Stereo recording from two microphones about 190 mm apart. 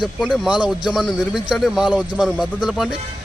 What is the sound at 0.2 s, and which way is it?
Speech, 5° right (ahead or behind).